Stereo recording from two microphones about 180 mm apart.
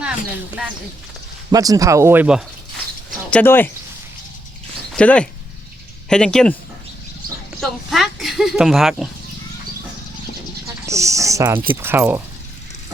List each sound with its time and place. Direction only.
1.5 s speech: 20° right (ahead or behind)
3.2 s speech: 10° left (ahead or behind)
4.9 s speech: 5° left (ahead or behind)
7.6 s speech: centre (ahead or behind)
10.8 s speech: 15° right (ahead or behind)